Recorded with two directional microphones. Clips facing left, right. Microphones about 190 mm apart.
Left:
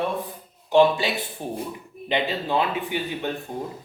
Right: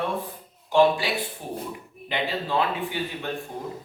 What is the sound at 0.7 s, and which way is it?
A man's voice, 20° left (ahead or behind).